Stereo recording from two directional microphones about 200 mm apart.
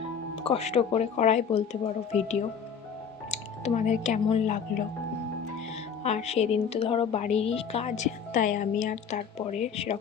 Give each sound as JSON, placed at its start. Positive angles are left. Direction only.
{"t": 0.4, "sound": "speech", "side_deg": 30}
{"t": 6.0, "sound": "speech", "side_deg": 35}